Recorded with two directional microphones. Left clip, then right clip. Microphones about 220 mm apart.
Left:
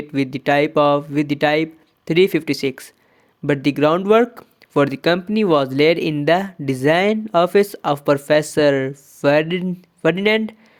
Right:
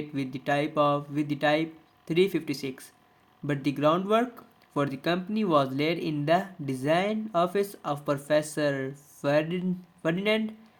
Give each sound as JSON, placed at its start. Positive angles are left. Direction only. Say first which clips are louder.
{"t": 0.1, "sound": "speech", "louder": "left 12 dB", "side_deg": 40}